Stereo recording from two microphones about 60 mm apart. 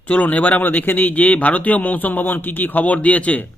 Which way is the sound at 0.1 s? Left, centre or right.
Left.